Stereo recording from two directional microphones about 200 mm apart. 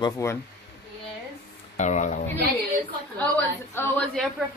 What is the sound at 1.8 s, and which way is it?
Speech, 35° left (ahead or behind).